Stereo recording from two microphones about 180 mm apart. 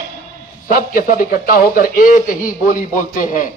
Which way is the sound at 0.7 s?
50° left (ahead or behind).